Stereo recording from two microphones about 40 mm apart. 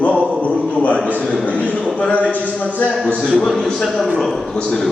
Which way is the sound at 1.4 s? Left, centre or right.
Left.